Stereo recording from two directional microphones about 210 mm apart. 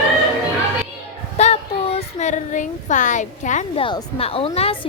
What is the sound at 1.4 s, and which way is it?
Speech, 30° left (ahead or behind).